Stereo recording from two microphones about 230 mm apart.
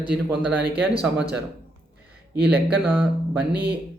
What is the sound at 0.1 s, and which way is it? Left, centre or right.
Speech, centre.